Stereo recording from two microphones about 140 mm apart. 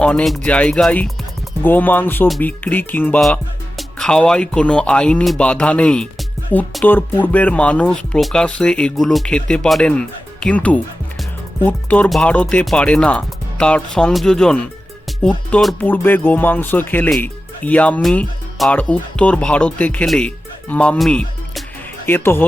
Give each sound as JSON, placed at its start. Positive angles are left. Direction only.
{"t": 0.0, "sound": "speech", "side_deg": 5}
{"t": 3.2, "sound": "speech", "side_deg": 0}
{"t": 22.0, "sound": "speech", "side_deg": 15}